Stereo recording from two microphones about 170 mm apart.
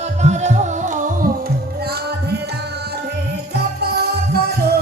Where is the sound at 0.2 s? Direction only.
40° right (ahead or behind).